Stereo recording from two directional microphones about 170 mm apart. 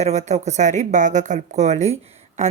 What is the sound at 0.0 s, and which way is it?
Speech, 40° right (ahead or behind).